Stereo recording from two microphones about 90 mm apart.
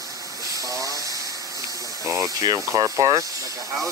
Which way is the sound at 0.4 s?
40° right (ahead or behind).